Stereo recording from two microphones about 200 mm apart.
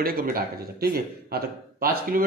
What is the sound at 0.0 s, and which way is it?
A man's voice, 45° right (ahead or behind).